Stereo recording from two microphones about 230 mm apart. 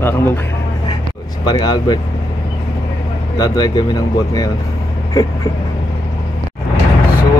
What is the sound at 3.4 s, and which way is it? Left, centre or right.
Speech, centre.